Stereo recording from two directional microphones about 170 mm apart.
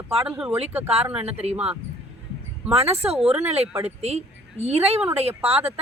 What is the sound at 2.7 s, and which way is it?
A man's voice, 35° right (ahead or behind).